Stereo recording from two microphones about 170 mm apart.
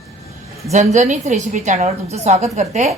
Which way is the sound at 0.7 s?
45° right (ahead or behind).